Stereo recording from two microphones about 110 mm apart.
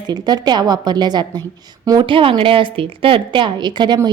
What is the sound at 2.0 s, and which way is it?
A woman's voice, 55° right (ahead or behind).